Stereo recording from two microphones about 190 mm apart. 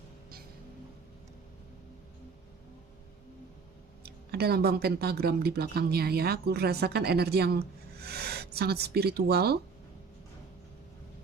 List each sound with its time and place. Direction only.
4.0 s speech: 55° right (ahead or behind)